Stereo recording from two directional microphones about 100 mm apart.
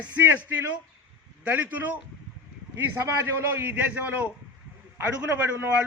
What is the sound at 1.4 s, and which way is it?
A man's voice, 15° right (ahead or behind).